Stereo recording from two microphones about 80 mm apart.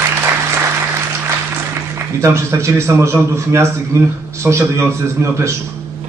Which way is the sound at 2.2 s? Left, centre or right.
Right.